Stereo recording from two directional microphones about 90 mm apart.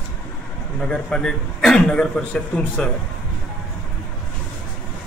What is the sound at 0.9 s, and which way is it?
A man's voice, 10° left (ahead or behind).